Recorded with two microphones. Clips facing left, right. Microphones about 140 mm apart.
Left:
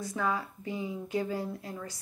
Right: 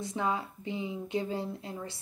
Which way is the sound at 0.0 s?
25° right (ahead or behind).